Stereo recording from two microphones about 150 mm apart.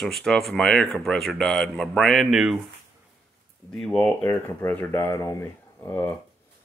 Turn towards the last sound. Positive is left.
turn(degrees=15)  # may be behind; listen again after turning